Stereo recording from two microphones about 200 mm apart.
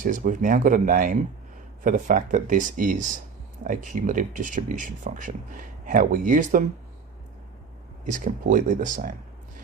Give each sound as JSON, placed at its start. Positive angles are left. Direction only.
{"t": 0.0, "sound": "speech", "side_deg": -40}
{"t": 8.0, "sound": "speech", "side_deg": -40}